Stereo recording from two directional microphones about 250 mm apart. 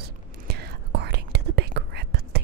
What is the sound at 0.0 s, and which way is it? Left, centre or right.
Whispering, right.